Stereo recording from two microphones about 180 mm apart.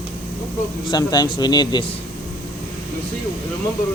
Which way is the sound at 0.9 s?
20° left (ahead or behind).